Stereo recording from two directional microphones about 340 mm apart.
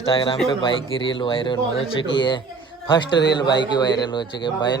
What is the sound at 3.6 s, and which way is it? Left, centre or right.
Speech, centre.